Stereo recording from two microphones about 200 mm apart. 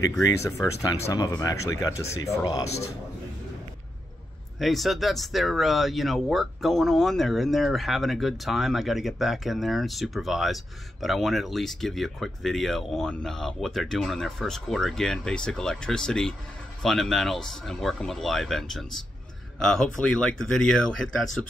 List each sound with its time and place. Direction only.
0.4 s speech: 15° left (ahead or behind)
4.6 s speech: centre (ahead or behind)